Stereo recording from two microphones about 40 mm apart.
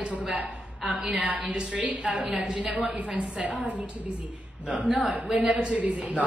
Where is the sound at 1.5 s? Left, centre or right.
Right.